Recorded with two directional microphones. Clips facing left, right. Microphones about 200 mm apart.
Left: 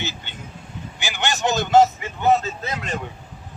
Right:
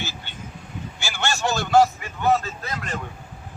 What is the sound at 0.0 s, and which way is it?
Vehicle, 20° left (ahead or behind).